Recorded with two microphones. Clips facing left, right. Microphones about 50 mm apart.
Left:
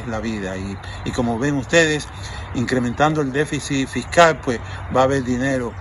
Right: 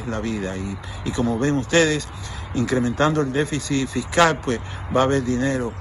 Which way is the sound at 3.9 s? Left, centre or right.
Left.